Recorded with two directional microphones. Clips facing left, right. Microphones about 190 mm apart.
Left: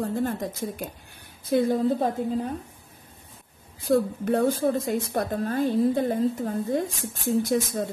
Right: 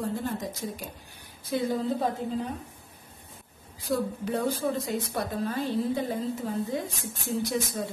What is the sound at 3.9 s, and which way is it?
A woman's voice, 50° left (ahead or behind).